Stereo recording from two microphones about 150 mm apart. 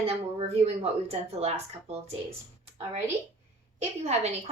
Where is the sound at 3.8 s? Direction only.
45° right (ahead or behind).